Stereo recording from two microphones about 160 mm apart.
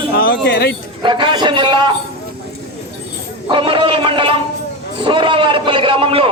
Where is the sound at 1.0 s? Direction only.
30° right (ahead or behind).